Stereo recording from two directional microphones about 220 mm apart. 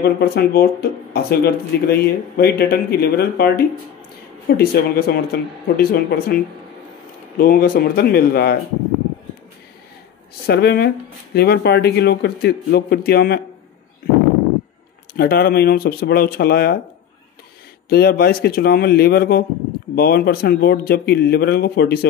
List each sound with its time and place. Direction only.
0.0 s speech: 45° left (ahead or behind)
7.3 s speech: 40° left (ahead or behind)
10.4 s speech: 45° left (ahead or behind)
15.1 s speech: 45° left (ahead or behind)
17.8 s speech: 45° left (ahead or behind)